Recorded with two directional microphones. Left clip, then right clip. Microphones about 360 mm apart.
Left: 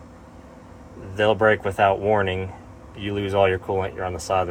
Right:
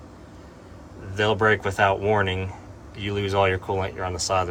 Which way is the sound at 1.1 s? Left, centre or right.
Centre.